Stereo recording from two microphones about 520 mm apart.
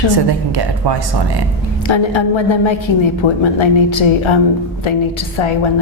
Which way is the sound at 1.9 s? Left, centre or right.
Left.